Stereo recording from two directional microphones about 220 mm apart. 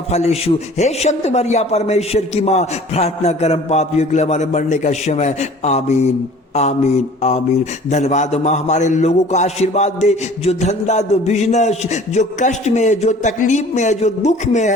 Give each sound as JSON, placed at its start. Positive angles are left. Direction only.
{"t": 0.1, "sound": "a man's voice", "side_deg": 30}
{"t": 6.5, "sound": "mantra", "side_deg": 30}
{"t": 7.2, "sound": "a man's voice", "side_deg": 30}